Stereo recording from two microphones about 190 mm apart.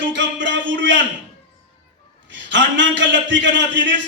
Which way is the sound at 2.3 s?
70° right (ahead or behind).